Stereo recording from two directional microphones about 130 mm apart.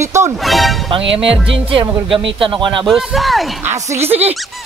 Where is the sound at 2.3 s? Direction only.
40° right (ahead or behind).